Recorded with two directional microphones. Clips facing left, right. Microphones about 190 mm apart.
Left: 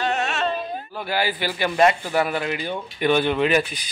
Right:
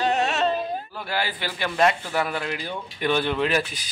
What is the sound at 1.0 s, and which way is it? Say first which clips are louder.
Speech: left 6 dB; 5° left (ahead or behind).